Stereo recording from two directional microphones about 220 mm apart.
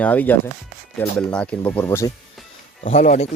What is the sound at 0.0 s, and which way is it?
Speech, 5° left (ahead or behind).